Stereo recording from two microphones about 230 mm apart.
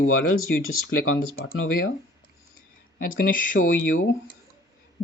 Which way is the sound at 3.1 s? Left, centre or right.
Left.